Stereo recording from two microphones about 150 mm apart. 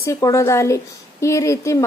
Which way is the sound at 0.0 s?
20° left (ahead or behind).